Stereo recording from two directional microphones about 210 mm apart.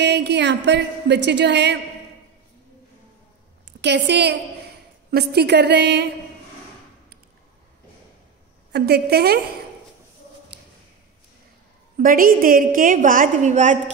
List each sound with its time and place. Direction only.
0.0 s a woman's voice: 55° right (ahead or behind)
3.8 s a woman's voice: 55° right (ahead or behind)
8.7 s a woman's voice: 50° right (ahead or behind)
12.0 s a woman's voice: 40° right (ahead or behind)